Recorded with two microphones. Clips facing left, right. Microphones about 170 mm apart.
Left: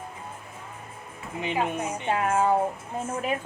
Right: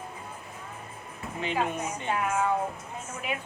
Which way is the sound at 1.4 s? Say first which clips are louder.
Left 2 dB; 20° left (ahead or behind).